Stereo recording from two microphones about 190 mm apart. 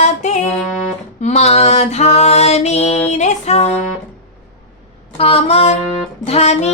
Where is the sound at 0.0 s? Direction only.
40° left (ahead or behind).